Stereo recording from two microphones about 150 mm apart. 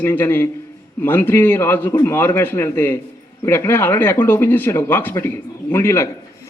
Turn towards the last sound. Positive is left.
turn(degrees=15)  # may be behind; listen again after turning